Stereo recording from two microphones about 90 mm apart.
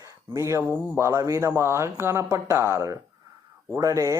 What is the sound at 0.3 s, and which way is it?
Speech, 35° right (ahead or behind).